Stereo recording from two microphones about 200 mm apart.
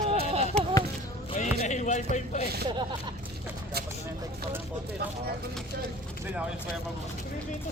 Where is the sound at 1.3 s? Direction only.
35° left (ahead or behind).